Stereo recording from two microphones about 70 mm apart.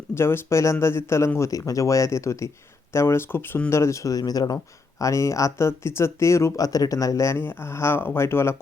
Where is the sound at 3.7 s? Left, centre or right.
Left.